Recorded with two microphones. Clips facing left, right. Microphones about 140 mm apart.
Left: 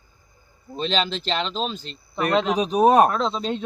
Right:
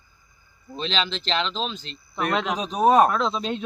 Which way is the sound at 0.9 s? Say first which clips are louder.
Left 2 dB; 45° left (ahead or behind).